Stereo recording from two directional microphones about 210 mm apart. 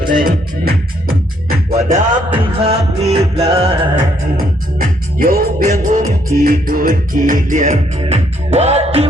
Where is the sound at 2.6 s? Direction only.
30° right (ahead or behind).